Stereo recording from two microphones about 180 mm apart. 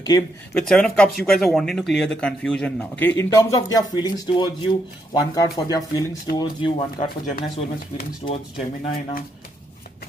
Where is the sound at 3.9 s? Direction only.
25° left (ahead or behind).